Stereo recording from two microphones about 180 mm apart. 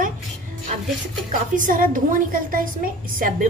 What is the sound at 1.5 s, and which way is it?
A woman's voice, 50° right (ahead or behind).